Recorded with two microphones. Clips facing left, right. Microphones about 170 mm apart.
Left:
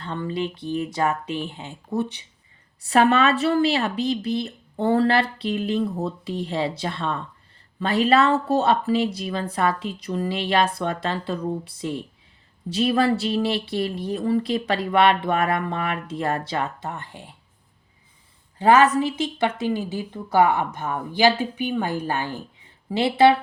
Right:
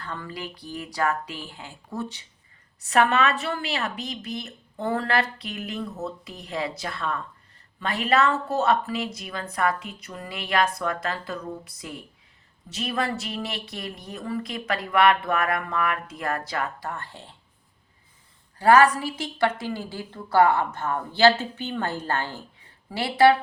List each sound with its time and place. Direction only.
0.0 s speech: 25° left (ahead or behind)
2.8 s a woman's voice: 30° left (ahead or behind); by 17.3 s 15° left (ahead or behind)
18.6 s a woman's voice: 20° left (ahead or behind)